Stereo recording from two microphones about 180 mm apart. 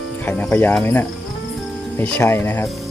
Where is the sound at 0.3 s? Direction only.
10° left (ahead or behind).